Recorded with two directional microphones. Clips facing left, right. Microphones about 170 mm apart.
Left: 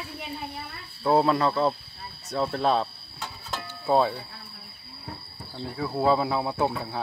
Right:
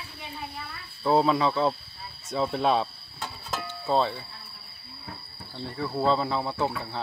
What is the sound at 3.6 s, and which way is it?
Music, 10° left (ahead or behind).